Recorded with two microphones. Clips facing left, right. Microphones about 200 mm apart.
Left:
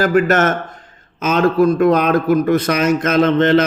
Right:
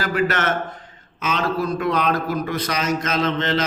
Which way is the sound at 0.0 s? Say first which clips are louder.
Left 8 dB; 45° left (ahead or behind).